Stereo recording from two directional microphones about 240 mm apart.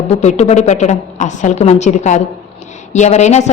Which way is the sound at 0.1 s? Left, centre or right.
Left.